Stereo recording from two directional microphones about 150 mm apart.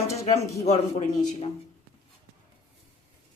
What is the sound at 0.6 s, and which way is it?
Speech, 45° left (ahead or behind).